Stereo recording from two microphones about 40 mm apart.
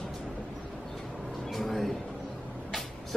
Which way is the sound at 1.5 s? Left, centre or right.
Centre.